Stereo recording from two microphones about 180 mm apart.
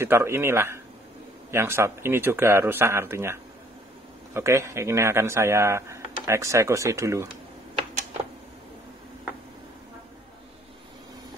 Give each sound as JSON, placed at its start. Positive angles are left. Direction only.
{"t": 0.0, "sound": "a man's voice", "side_deg": -15}